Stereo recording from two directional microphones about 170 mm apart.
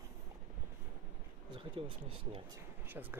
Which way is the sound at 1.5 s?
30° right (ahead or behind).